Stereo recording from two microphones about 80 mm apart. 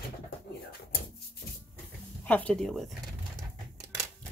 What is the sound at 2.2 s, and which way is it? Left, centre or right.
Speech, centre.